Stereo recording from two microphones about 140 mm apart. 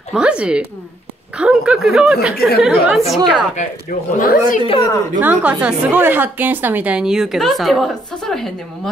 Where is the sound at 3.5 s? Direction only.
65° left (ahead or behind); by 4.6 s 80° left.